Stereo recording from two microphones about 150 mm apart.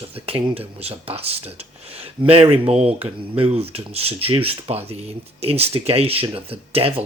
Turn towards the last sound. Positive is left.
turn(degrees=-40)  # may be behind; listen again after turning